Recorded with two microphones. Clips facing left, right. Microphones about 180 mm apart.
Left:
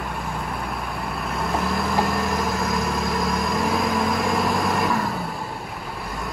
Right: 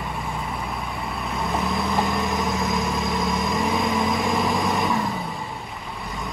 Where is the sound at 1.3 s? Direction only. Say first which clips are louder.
Even; centre (ahead or behind).